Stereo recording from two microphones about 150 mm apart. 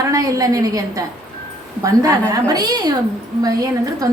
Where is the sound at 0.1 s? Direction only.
20° right (ahead or behind).